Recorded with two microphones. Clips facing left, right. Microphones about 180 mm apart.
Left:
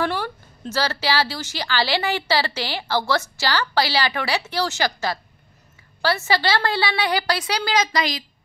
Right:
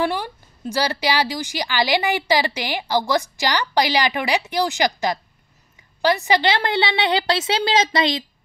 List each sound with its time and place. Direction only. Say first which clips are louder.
0.0 s a woman's voice: right 2 dB; 15° right (ahead or behind)